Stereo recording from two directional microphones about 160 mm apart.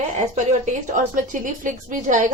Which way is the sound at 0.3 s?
50° right (ahead or behind).